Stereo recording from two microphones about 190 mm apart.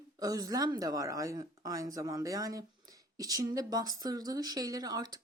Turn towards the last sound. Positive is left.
turn(degrees=-20)  # may be behind; listen again after turning